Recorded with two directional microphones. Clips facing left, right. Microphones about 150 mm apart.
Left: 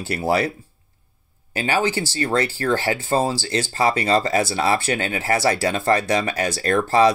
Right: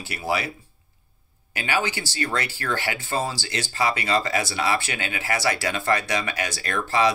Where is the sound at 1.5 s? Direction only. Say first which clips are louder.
Left 5 dB; 35° left (ahead or behind).